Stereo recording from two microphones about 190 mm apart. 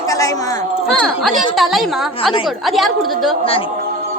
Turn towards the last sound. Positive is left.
turn(degrees=0)  # may be behind; listen again after turning